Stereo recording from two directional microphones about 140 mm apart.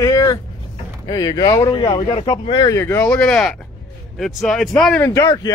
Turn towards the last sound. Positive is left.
turn(degrees=20)  # may be behind; listen again after turning